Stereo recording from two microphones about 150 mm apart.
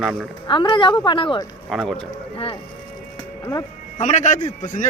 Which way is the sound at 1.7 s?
Centre (ahead or behind).